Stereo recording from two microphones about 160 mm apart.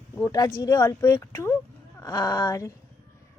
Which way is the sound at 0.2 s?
20° left (ahead or behind).